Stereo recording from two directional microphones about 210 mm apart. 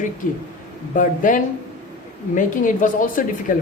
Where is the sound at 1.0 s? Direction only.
40° left (ahead or behind).